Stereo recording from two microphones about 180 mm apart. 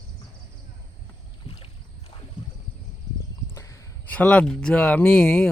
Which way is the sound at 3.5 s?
15° left (ahead or behind).